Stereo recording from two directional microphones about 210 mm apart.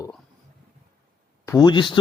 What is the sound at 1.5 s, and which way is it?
Speech, 20° left (ahead or behind).